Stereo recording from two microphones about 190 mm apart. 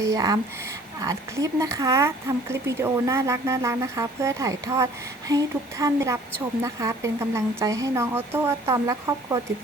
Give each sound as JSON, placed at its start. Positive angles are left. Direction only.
{"t": 0.0, "sound": "a woman's voice", "side_deg": -20}